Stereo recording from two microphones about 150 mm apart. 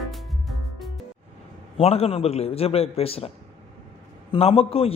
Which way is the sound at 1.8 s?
40° left (ahead or behind).